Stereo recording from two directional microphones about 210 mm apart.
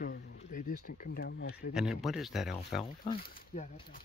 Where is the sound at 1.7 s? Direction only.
5° right (ahead or behind).